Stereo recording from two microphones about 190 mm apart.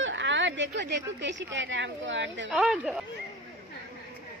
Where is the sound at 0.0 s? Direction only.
75° right (ahead or behind).